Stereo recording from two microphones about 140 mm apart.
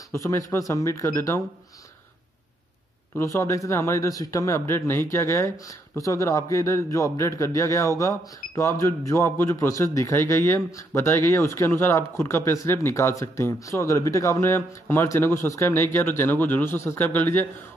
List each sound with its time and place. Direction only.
0.1 s speech: 20° left (ahead or behind)
3.3 s speech: 20° left (ahead or behind)